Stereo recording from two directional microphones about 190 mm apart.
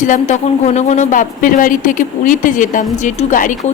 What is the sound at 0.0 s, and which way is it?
A woman's voice, 40° left (ahead or behind).